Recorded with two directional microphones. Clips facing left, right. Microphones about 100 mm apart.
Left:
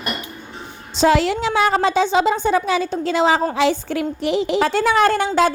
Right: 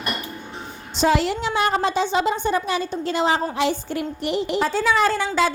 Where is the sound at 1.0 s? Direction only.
90° left.